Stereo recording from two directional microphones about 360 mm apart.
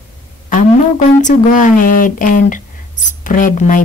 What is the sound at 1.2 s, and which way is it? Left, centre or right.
Speech, left.